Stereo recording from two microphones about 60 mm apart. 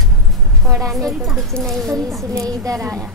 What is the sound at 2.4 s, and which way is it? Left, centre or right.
Speech, right.